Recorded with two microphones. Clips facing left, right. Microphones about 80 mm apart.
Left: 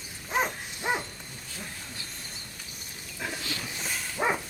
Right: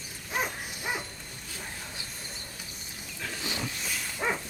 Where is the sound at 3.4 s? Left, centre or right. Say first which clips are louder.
Right 1 dB; right.